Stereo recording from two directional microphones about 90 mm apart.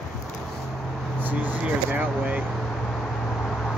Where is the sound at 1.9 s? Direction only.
20° right (ahead or behind).